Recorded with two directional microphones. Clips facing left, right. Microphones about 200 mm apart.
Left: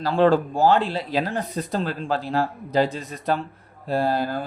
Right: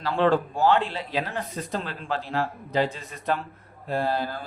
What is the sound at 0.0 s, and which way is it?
Speech, 35° left (ahead or behind).